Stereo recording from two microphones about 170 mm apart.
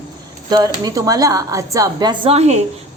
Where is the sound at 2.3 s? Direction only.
40° right (ahead or behind).